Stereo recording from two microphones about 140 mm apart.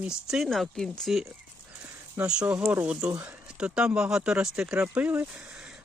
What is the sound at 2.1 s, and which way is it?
Speech, 10° right (ahead or behind).